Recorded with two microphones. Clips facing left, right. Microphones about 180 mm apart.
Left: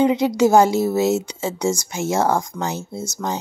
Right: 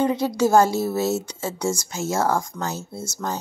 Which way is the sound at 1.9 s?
20° left (ahead or behind).